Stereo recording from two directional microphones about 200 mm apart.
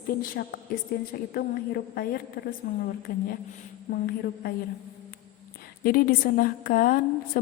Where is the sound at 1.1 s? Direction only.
50° left (ahead or behind).